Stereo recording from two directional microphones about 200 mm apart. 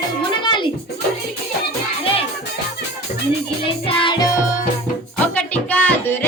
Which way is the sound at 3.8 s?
25° left (ahead or behind).